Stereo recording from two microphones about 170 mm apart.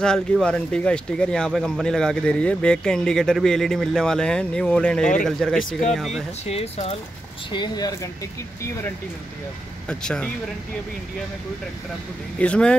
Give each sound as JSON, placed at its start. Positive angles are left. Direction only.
{"t": 0.0, "sound": "speech", "side_deg": 5}
{"t": 6.4, "sound": "speech", "side_deg": 40}
{"t": 7.5, "sound": "speech", "side_deg": 25}
{"t": 9.8, "sound": "speech", "side_deg": 5}
{"t": 12.4, "sound": "speech", "side_deg": 5}